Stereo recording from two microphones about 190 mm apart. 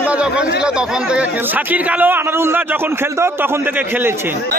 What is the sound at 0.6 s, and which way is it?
A man's voice, 5° right (ahead or behind).